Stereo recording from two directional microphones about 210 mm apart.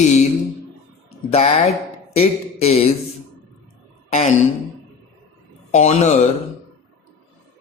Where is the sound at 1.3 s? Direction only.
30° left (ahead or behind).